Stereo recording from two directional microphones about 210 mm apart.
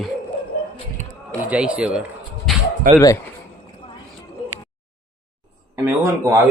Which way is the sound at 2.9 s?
40° right (ahead or behind).